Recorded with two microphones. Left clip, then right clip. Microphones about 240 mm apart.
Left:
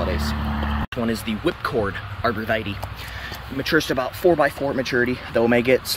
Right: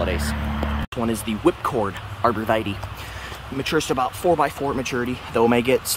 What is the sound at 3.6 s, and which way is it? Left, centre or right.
Speech, centre.